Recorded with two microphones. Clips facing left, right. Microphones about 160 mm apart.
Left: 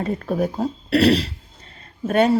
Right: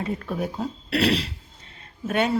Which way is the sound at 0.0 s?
40° left (ahead or behind).